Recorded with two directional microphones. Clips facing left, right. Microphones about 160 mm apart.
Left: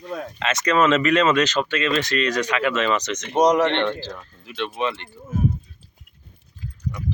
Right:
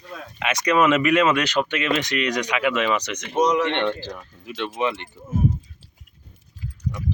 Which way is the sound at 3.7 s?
15° right (ahead or behind).